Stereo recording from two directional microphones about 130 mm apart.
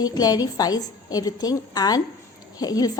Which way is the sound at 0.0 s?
30° left (ahead or behind).